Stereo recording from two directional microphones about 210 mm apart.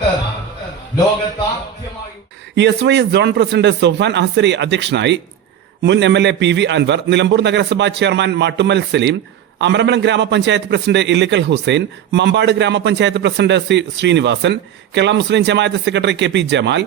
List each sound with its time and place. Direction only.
2.6 s a man's voice: 55° right (ahead or behind)